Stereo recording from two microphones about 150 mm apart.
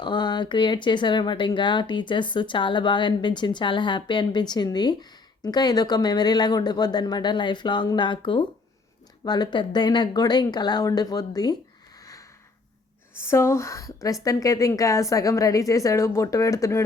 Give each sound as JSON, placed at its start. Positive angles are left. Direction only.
{"t": 0.0, "sound": "a woman's voice", "side_deg": 30}
{"t": 11.9, "sound": "a sound", "side_deg": 25}
{"t": 13.2, "sound": "a woman's voice", "side_deg": 20}